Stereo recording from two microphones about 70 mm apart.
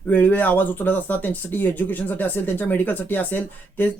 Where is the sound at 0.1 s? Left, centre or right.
Left.